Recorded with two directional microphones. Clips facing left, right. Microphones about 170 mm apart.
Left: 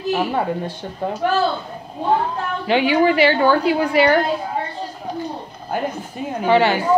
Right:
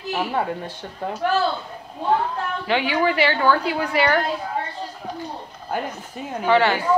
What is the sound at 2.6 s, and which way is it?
A woman's voice, 20° left (ahead or behind).